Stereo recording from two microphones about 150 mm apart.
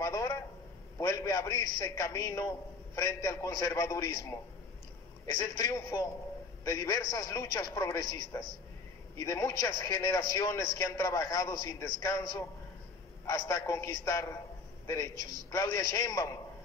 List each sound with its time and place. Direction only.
0.0 s a man's voice: 20° left (ahead or behind)
5.4 s a man's voice: 25° left (ahead or behind)
15.1 s a man's voice: 70° right (ahead or behind)
15.5 s a man's voice: 25° left (ahead or behind)